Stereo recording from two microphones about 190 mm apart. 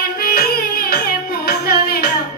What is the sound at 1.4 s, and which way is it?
Music, 55° left (ahead or behind).